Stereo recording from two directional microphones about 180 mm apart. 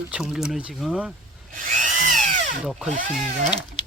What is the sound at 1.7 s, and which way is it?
Drill, 45° right (ahead or behind).